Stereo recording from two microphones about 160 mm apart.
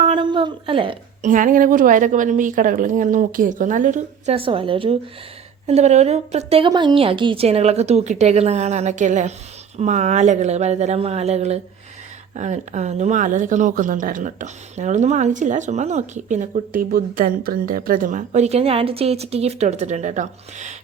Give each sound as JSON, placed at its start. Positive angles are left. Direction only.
{"t": 0.0, "sound": "a woman's voice", "side_deg": -30}
{"t": 1.2, "sound": "a woman's voice", "side_deg": -55}
{"t": 4.4, "sound": "a woman's voice", "side_deg": -35}
{"t": 6.7, "sound": "a woman's voice", "side_deg": -30}